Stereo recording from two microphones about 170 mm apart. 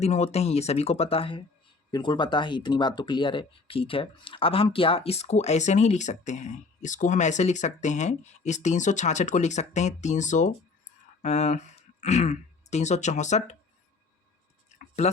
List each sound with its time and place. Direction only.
0.0 s speech: 40° left (ahead or behind)
15.0 s speech: 40° left (ahead or behind)